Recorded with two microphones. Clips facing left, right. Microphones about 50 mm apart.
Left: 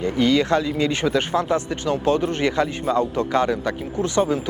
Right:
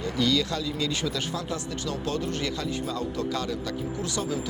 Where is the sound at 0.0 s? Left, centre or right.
Left.